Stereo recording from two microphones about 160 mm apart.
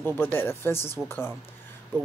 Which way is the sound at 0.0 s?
15° left (ahead or behind).